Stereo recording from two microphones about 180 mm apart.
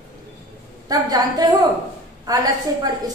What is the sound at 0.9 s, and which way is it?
A woman's voice, 20° right (ahead or behind).